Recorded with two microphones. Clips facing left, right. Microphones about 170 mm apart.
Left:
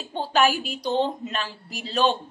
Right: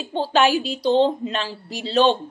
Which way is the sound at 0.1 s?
30° right (ahead or behind).